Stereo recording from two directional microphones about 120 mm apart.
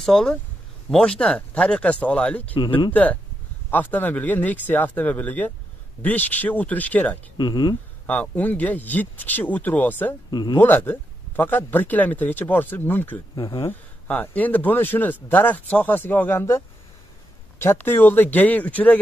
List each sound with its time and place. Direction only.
0.0 s speech: 5° left (ahead or behind)
7.3 s speech: 35° left (ahead or behind)
8.1 s speech: 15° left (ahead or behind)
10.3 s speech: 35° left (ahead or behind)
10.6 s speech: 15° left (ahead or behind)